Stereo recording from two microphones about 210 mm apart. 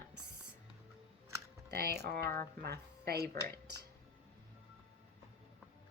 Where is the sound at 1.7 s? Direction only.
50° right (ahead or behind).